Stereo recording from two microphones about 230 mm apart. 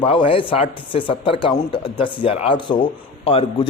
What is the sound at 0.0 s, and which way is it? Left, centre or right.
Speech, left.